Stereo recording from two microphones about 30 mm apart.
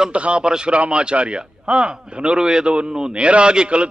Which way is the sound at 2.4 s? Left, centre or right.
Right.